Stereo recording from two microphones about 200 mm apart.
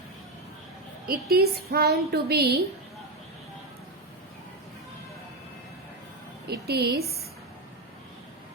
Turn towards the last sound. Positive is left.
turn(degrees=-55)  # may be behind; listen again after turning